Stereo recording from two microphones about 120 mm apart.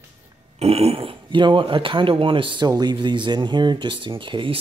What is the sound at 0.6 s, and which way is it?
Speech, 55° right (ahead or behind).